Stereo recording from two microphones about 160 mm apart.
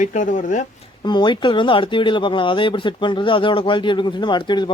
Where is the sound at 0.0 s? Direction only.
50° left (ahead or behind).